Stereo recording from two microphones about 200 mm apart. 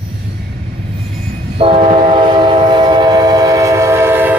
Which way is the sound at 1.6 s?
30° right (ahead or behind).